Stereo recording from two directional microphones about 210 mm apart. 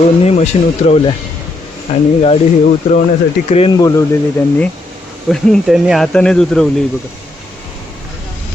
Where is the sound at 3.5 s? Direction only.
25° left (ahead or behind).